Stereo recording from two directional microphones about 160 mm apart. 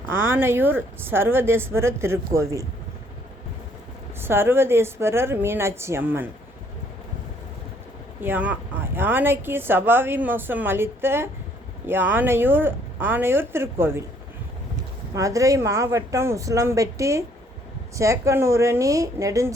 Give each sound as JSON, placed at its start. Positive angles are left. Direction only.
{"t": 0.3, "sound": "speech", "side_deg": -15}
{"t": 4.2, "sound": "speech", "side_deg": -15}
{"t": 8.2, "sound": "speech", "side_deg": -10}
{"t": 15.1, "sound": "speech", "side_deg": -20}